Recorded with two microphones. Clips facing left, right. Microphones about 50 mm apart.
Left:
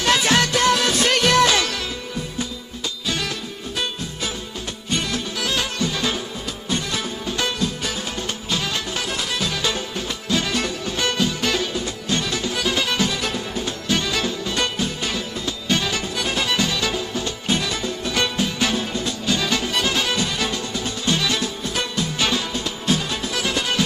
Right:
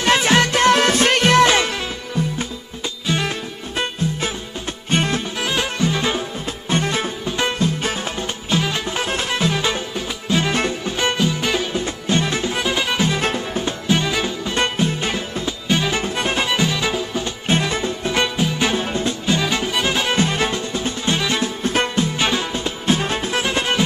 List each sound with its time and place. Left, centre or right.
0.0 s music: right
2.2 s music: right
3.1 s music: right
11.7 s music: right
13.1 s music: right
13.8 s music: centre
14.5 s music: right
16.4 s music: centre
17.5 s music: right
18.2 s music: centre
19.4 s music: centre
20.2 s music: right